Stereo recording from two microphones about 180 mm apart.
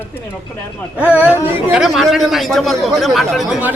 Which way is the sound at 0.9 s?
10° right (ahead or behind).